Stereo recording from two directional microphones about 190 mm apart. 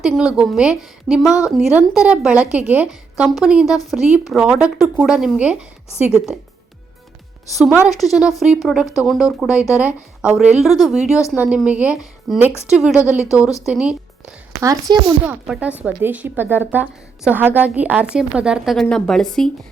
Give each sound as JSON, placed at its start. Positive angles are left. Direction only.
{"t": 0.0, "sound": "a woman's voice", "side_deg": 0}
{"t": 7.9, "sound": "a woman's voice", "side_deg": 0}
{"t": 14.5, "sound": "a woman's voice", "side_deg": -20}
{"t": 15.3, "sound": "a woman's voice", "side_deg": -5}